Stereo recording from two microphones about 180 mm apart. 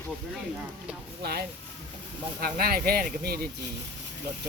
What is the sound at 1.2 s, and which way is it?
Speech, 60° right (ahead or behind).